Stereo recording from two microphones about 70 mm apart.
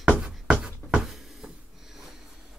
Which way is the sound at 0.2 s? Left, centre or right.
Centre.